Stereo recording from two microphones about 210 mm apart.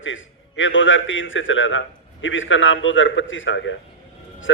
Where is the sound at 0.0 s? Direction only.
65° left (ahead or behind).